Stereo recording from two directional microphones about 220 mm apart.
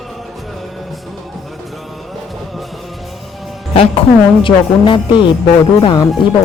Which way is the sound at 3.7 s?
25° left (ahead or behind).